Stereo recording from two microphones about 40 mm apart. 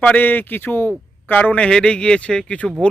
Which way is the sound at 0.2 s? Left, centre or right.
Left.